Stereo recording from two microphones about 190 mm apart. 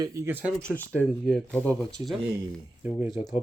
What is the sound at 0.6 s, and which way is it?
Speech, 5° left (ahead or behind).